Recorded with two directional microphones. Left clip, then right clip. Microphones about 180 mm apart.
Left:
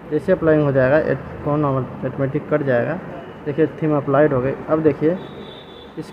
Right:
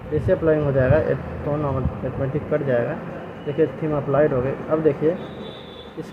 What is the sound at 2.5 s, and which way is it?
A man's voice, 20° left (ahead or behind).